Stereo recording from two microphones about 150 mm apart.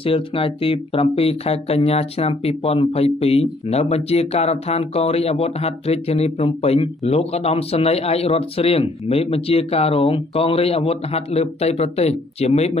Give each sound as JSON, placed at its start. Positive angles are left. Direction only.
{"t": 0.0, "sound": "speech", "side_deg": 40}